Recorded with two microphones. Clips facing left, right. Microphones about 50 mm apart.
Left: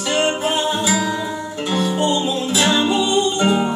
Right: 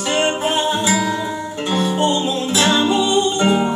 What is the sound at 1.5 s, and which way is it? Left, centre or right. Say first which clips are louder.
Music: right 1 dB; right.